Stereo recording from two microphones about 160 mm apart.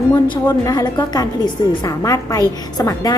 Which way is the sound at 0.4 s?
20° left (ahead or behind).